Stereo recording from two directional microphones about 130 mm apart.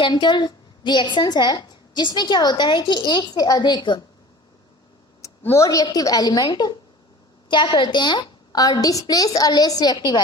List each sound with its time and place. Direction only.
0.0 s a woman's voice: 35° left (ahead or behind)
5.2 s a woman's voice: 20° left (ahead or behind)